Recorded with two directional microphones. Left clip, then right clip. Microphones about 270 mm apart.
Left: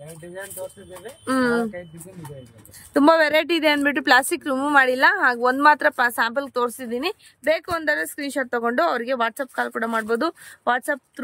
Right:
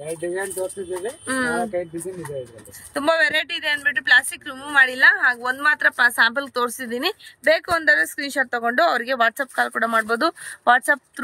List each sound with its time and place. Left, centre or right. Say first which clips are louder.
1.2 s a woman's voice: left 3 dB; centre
2.9 s a woman's voice: left 3 dB; centre